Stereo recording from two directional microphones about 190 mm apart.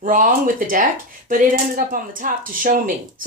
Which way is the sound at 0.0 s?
45° right (ahead or behind).